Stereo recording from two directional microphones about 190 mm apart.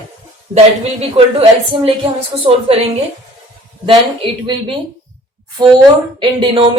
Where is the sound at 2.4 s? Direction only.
30° right (ahead or behind).